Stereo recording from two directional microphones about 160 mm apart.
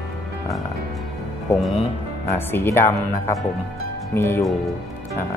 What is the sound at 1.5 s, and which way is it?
Speech, 15° left (ahead or behind).